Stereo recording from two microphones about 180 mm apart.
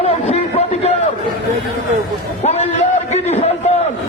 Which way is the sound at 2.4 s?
35° left (ahead or behind).